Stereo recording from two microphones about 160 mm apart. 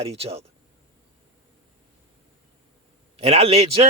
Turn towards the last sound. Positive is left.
turn(degrees=-40)  # may be behind; listen again after turning